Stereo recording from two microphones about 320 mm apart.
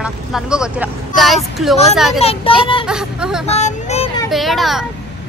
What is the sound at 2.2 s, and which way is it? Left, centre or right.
Speech, centre.